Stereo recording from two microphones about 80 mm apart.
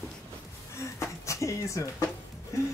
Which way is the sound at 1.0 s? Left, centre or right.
Left.